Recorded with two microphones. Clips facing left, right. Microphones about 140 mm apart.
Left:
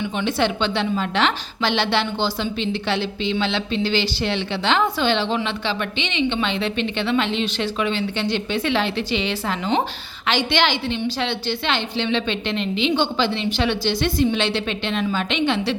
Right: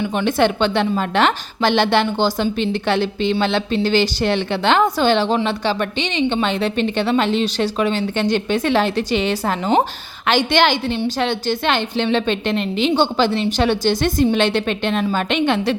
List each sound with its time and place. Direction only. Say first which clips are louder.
0.0 s a woman's voice: right 5 dB; 45° right (ahead or behind)